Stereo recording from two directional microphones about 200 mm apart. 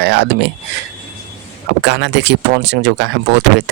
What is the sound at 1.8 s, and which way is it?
Speech, 60° right (ahead or behind).